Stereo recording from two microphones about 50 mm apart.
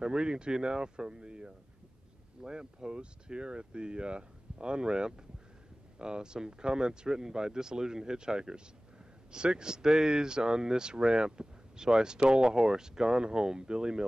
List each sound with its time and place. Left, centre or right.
0.0 s speech: centre